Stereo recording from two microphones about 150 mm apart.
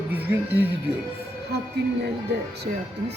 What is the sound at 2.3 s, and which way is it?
Speech, 90° right.